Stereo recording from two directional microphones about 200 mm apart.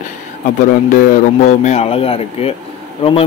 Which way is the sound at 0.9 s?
40° left (ahead or behind).